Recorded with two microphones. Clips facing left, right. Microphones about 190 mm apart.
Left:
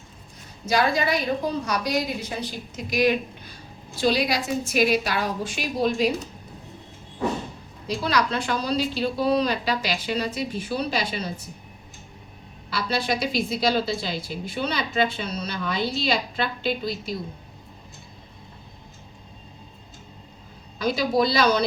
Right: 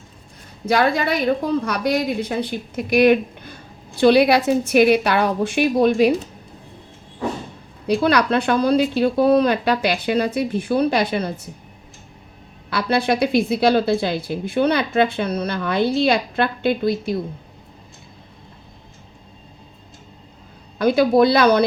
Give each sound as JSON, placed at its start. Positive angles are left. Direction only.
{"t": 0.6, "sound": "a woman's voice", "side_deg": -55}
{"t": 7.9, "sound": "a woman's voice", "side_deg": -60}
{"t": 12.7, "sound": "a woman's voice", "side_deg": -60}
{"t": 20.7, "sound": "a woman's voice", "side_deg": -55}